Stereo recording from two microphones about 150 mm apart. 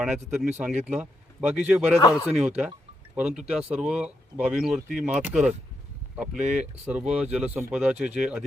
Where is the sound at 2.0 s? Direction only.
25° left (ahead or behind).